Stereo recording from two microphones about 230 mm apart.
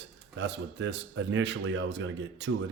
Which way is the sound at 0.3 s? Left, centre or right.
Right.